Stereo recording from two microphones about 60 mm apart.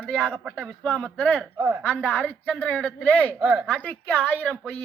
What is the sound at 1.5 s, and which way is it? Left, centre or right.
Speech, right.